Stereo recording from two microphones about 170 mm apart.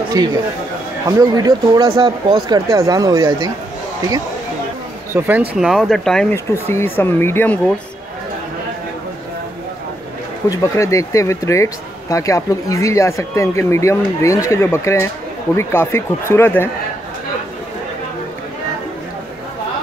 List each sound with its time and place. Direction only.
0.2 s speech: 20° right (ahead or behind)
5.1 s speech: 15° right (ahead or behind)
5.6 s speech: centre (ahead or behind)
6.3 s speech: 15° left (ahead or behind)
10.5 s speech: 20° left (ahead or behind)